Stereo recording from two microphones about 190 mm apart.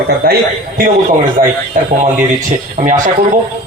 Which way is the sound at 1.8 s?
45° right (ahead or behind).